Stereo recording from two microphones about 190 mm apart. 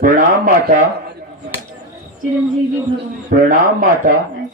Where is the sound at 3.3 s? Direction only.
50° right (ahead or behind).